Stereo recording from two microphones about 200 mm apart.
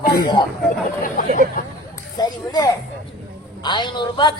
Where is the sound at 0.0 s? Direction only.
45° left (ahead or behind).